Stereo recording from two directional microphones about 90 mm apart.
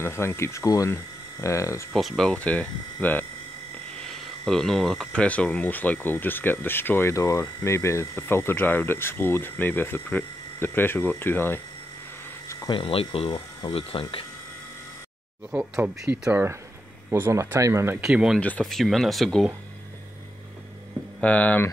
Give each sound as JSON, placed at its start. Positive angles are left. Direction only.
{"t": 0.0, "sound": "speech", "side_deg": 25}
{"t": 2.0, "sound": "speech", "side_deg": 5}
{"t": 4.1, "sound": "speech", "side_deg": 5}
{"t": 12.6, "sound": "speech", "side_deg": 75}
{"t": 15.8, "sound": "speech", "side_deg": -20}
{"t": 18.0, "sound": "speech", "side_deg": -5}
{"t": 18.4, "sound": "speech", "side_deg": 15}
{"t": 18.7, "sound": "speech", "side_deg": 0}
{"t": 21.2, "sound": "speech", "side_deg": 15}